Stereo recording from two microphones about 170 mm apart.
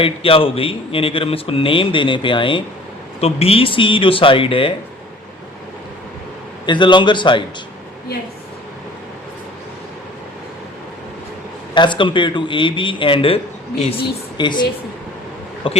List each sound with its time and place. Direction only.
0.0 s a man's voice: 35° left (ahead or behind)
6.7 s a man's voice: 25° left (ahead or behind)
11.7 s a man's voice: 25° left (ahead or behind)